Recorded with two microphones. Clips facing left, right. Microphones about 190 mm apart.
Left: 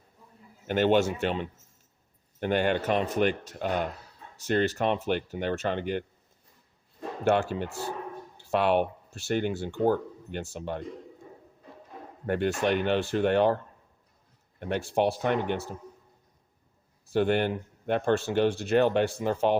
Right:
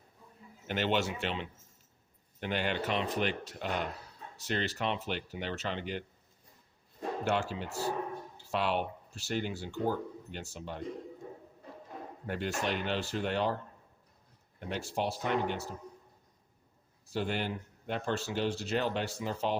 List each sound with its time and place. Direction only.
0.7 s speech: 45° left (ahead or behind)
7.3 s speech: 55° left (ahead or behind)
12.2 s speech: 55° left (ahead or behind)
14.7 s speech: 55° left (ahead or behind)
17.1 s speech: 60° left (ahead or behind)